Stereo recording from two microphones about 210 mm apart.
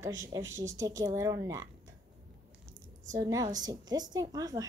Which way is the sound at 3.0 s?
15° right (ahead or behind).